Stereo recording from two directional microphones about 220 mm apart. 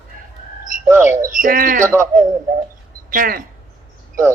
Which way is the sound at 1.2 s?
40° right (ahead or behind).